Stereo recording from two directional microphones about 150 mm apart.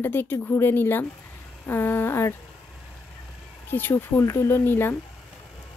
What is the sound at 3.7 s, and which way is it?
A woman's voice, 15° left (ahead or behind).